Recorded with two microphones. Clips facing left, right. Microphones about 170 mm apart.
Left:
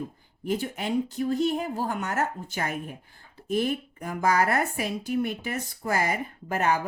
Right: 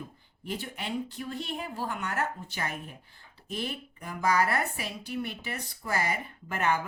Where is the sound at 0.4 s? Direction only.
45° left (ahead or behind).